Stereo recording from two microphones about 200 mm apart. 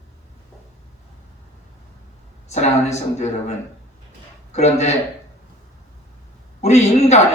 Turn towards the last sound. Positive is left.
turn(degrees=35)  # may be behind; listen again after turning